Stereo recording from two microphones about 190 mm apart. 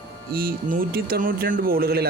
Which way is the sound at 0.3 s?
50° right (ahead or behind).